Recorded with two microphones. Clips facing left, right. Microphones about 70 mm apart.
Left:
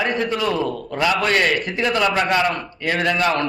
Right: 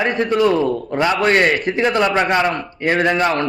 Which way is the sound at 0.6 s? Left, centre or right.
Right.